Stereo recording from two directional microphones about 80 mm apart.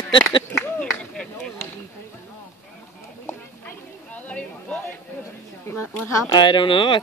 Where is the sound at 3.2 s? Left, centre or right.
Left.